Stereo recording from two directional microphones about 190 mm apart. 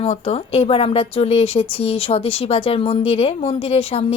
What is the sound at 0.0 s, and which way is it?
Speech, 35° left (ahead or behind).